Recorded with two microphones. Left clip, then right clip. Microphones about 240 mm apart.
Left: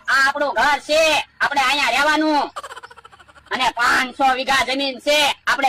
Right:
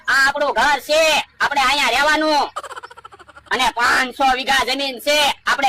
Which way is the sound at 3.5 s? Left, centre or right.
Right.